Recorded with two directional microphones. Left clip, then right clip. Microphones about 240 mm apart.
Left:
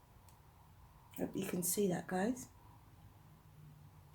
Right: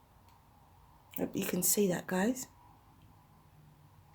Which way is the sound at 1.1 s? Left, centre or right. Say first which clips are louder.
Right 5 dB; right.